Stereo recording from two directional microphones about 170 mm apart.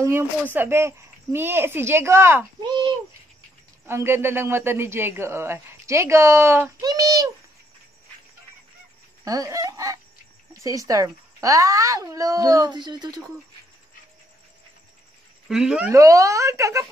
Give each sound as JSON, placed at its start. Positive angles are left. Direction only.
{"t": 0.0, "sound": "a man's voice", "side_deg": -15}
{"t": 3.8, "sound": "a man's voice", "side_deg": -15}
{"t": 9.2, "sound": "speech", "side_deg": -20}
{"t": 15.4, "sound": "speech", "side_deg": -5}
{"t": 15.9, "sound": "a man's voice", "side_deg": -20}